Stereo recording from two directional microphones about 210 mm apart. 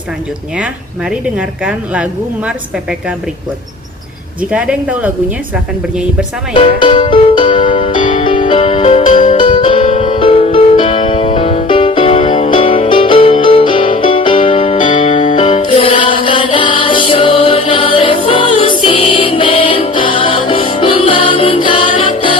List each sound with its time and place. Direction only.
1.1 s a woman's voice: 5° right (ahead or behind)
4.5 s speech: 5° right (ahead or behind)
6.5 s music: 25° left (ahead or behind)